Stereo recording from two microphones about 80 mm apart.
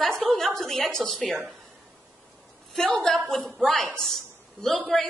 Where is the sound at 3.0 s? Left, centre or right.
Centre.